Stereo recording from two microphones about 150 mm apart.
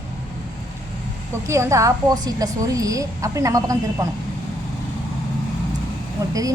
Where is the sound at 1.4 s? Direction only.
20° right (ahead or behind).